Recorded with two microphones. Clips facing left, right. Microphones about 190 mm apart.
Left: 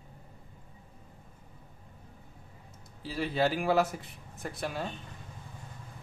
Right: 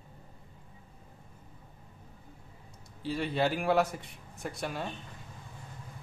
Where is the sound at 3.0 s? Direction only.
Centre (ahead or behind).